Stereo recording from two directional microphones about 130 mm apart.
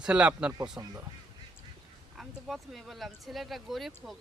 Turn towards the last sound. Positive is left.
turn(degrees=0)  # may be behind; listen again after turning